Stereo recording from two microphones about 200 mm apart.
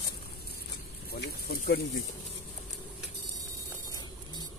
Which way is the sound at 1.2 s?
55° left (ahead or behind).